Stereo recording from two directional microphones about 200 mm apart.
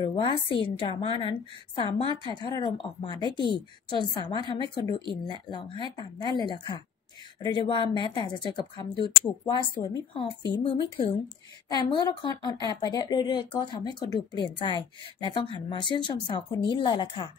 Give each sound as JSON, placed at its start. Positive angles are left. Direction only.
{"t": 0.0, "sound": "speech", "side_deg": 20}